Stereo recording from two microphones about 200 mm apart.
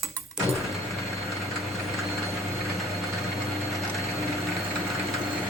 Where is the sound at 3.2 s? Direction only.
Centre (ahead or behind).